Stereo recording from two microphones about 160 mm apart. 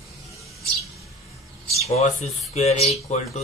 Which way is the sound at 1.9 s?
40° left (ahead or behind).